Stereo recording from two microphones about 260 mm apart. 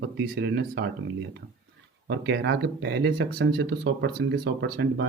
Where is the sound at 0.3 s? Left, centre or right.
Right.